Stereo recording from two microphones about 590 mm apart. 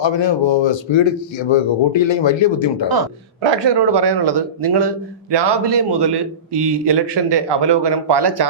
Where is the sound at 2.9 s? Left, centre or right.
Right.